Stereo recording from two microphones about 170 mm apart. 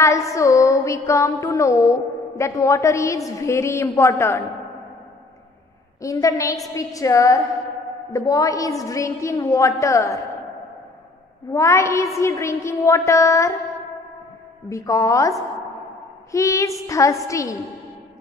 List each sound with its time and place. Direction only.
0.0 s music: 20° left (ahead or behind)
5.9 s a woman's voice: 20° left (ahead or behind)
11.5 s music: 15° left (ahead or behind)
14.7 s a woman's voice: 20° left (ahead or behind)
16.3 s music: 20° left (ahead or behind)
16.8 s a woman's voice: 20° left (ahead or behind)